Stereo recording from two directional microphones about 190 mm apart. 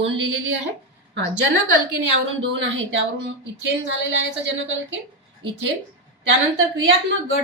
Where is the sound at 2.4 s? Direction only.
75° right (ahead or behind).